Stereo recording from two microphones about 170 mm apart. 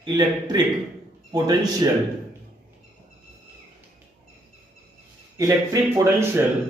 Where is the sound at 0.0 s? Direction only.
25° right (ahead or behind).